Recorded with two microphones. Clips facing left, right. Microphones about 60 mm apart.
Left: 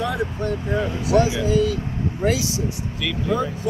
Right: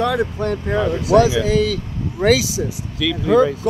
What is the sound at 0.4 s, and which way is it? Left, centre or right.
Speech, right.